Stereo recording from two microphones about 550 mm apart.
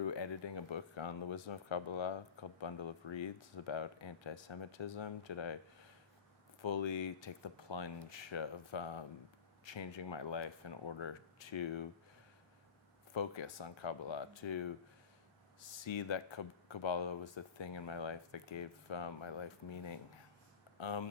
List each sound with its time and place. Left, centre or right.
0.0 s speech: left
6.6 s speech: left
13.1 s speech: left
15.8 s speech: left